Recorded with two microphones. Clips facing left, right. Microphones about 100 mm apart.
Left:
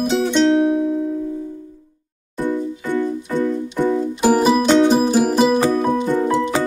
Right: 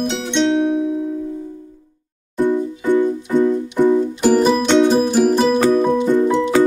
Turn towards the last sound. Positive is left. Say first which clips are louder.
# right 1 dB
turn(degrees=5)  # may be behind; listen again after turning